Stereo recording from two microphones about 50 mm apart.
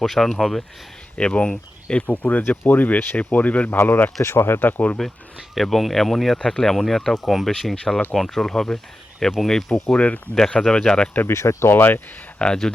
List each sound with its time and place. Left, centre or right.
0.0 s speech: centre
1.1 s speech: left
2.0 s speech: left
3.8 s speech: left
4.2 s speech: left
5.0 s speech: centre
9.9 s speech: left
11.3 s speech: left
12.4 s speech: centre